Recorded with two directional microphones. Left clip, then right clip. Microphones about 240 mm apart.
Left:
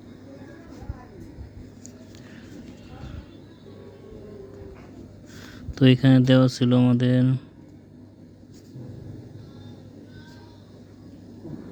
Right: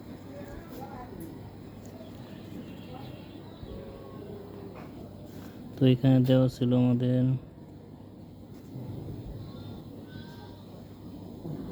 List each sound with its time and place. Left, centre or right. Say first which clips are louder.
5.7 s speech: left 6 dB; left